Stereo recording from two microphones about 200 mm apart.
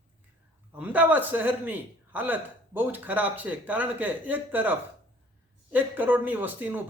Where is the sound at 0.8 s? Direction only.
10° right (ahead or behind).